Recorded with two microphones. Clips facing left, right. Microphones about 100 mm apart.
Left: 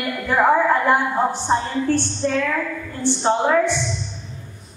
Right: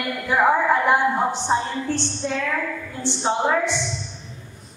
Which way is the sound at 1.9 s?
15° right (ahead or behind).